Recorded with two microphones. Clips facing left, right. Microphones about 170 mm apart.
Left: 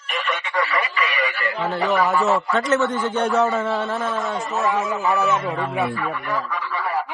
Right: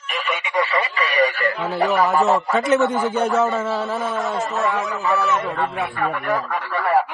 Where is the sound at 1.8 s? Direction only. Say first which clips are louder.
Right 2 dB; centre (ahead or behind).